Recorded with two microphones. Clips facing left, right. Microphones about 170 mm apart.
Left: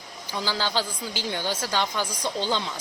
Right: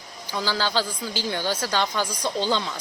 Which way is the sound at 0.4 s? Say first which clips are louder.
Right 2 dB; 15° left (ahead or behind).